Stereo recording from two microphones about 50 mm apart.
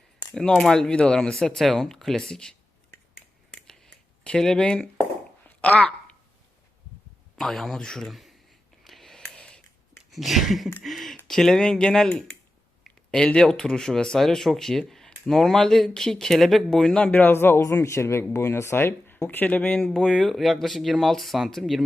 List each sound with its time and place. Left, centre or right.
0.3 s speech: centre
3.8 s a sound: centre
4.6 s speech: centre
5.5 s a sound: left
7.3 s speech: centre
8.0 s speech: centre
8.8 s a sound: centre
11.3 s speech: centre
17.1 s speech: left
17.6 s a man's voice: left
19.9 s speech: centre